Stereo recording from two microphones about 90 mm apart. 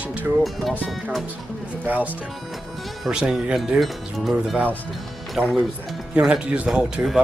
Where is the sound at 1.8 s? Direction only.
20° right (ahead or behind).